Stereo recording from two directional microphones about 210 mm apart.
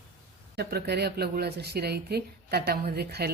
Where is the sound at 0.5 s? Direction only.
50° right (ahead or behind).